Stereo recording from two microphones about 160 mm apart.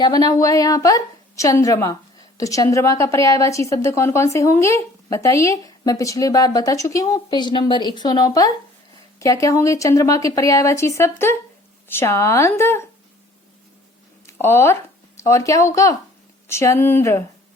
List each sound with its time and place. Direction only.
0.0 s a woman's voice: 25° left (ahead or behind)
14.3 s a woman's voice: 15° left (ahead or behind)